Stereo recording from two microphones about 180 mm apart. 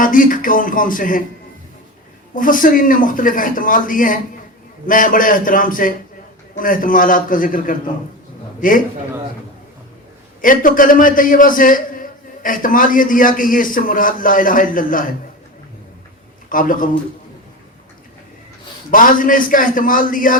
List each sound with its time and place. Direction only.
0.0 s a man's voice: 50° left (ahead or behind)
2.3 s a man's voice: 50° left (ahead or behind)
10.4 s a man's voice: 50° left (ahead or behind)
16.5 s a man's voice: 50° left (ahead or behind)
18.9 s a man's voice: 50° left (ahead or behind)